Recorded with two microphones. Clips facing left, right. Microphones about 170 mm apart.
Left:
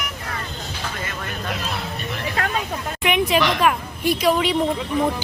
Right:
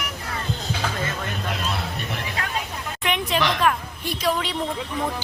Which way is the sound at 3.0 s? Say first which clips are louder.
Left 4 dB; 10° left (ahead or behind).